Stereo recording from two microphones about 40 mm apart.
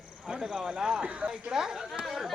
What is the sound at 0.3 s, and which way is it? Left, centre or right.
A man's voice, centre.